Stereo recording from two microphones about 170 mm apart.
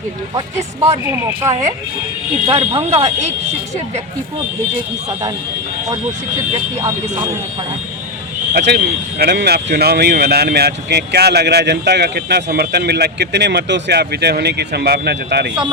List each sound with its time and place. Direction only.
0.3 s speech: 15° right (ahead or behind)
2.5 s speech: 35° right (ahead or behind)
8.5 s speech: 70° right (ahead or behind)